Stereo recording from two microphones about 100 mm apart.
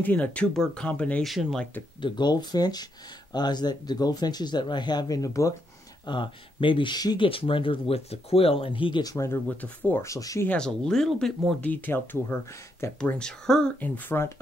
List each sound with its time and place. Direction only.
0.0 s speech: 15° left (ahead or behind)
1.2 s speech: centre (ahead or behind)
2.0 s speech: 50° left (ahead or behind); by 5.5 s 35° left (ahead or behind)
6.0 s speech: 55° left (ahead or behind)
7.2 s speech: 65° left (ahead or behind)
9.0 s speech: 30° left (ahead or behind)
10.6 s speech: 5° left (ahead or behind)
11.6 s speech: 20° left (ahead or behind)
13.0 s speech: 10° left (ahead or behind)